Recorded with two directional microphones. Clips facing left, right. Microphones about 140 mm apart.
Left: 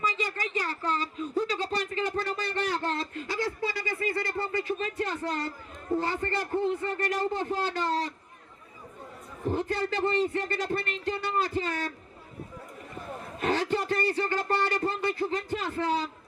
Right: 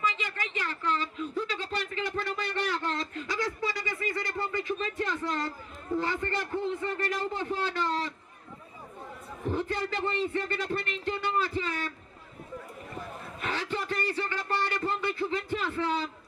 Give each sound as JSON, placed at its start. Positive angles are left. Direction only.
{"t": 0.0, "sound": "a sound", "side_deg": 35}
{"t": 5.9, "sound": "a man's voice", "side_deg": 35}
{"t": 9.5, "sound": "a man's voice", "side_deg": 35}
{"t": 13.4, "sound": "a man's voice", "side_deg": 40}